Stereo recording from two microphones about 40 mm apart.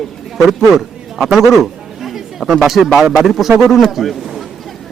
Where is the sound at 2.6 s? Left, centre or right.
Centre.